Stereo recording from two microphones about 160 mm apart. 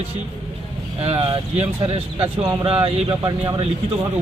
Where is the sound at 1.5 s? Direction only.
35° right (ahead or behind).